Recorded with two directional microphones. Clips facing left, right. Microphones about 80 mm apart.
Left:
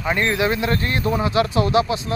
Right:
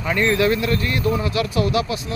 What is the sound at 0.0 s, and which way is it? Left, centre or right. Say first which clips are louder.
Speech: right 2 dB; left.